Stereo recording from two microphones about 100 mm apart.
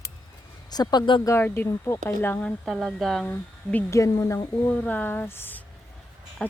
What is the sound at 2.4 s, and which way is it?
Speech, centre (ahead or behind).